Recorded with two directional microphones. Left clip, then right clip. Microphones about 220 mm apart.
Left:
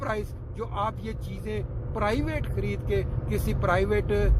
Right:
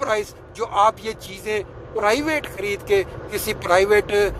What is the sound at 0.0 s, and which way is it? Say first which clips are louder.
Speech: right 9 dB; 15° right (ahead or behind).